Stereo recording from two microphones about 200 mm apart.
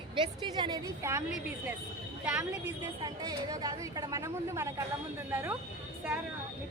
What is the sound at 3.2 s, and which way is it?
A woman's voice, 20° right (ahead or behind).